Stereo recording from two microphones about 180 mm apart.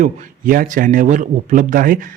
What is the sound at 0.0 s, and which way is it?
Speech, 50° right (ahead or behind).